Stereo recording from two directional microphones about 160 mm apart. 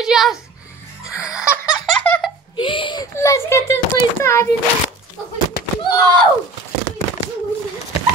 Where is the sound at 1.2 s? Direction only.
5° right (ahead or behind).